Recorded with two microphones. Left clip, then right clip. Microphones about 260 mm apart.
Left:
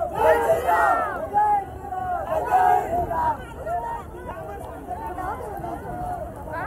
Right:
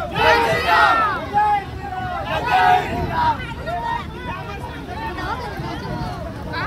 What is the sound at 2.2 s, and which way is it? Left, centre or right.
Hubbub, right.